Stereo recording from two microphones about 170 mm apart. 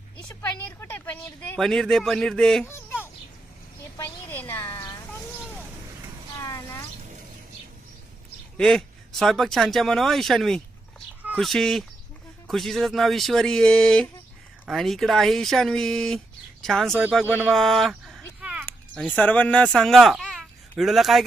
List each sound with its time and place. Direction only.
0.8 s speech: 10° left (ahead or behind)
3.9 s a woman's voice: 15° left (ahead or behind)
4.7 s insect: 20° left (ahead or behind)
5.4 s vehicle: 5° right (ahead or behind)
6.4 s speech: 15° left (ahead or behind)
8.5 s speech: centre (ahead or behind)
17.0 s speech: 10° right (ahead or behind)
17.5 s a sound: centre (ahead or behind)
18.9 s speech: 5° left (ahead or behind)